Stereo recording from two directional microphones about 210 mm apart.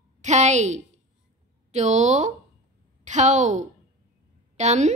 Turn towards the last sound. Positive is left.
turn(degrees=-35)  # may be behind; listen again after turning